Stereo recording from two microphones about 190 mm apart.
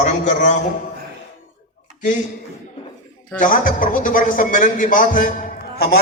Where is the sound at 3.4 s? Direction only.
45° left (ahead or behind).